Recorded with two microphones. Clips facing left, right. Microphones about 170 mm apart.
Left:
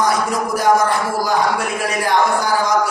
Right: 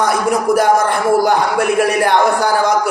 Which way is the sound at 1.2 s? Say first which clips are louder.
Right 4 dB; 60° right (ahead or behind).